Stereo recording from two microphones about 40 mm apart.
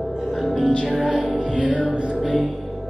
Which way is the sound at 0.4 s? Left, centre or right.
Centre.